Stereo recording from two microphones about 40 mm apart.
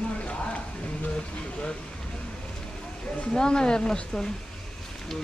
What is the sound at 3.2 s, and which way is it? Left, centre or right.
Speech, left.